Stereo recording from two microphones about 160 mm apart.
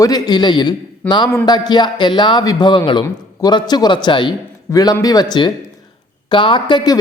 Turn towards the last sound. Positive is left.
turn(degrees=30)  # may be behind; listen again after turning